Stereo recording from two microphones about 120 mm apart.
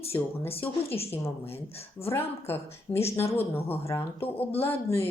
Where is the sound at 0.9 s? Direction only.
55° left (ahead or behind).